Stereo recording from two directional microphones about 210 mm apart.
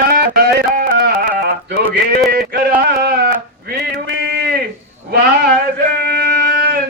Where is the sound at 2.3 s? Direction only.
45° right (ahead or behind).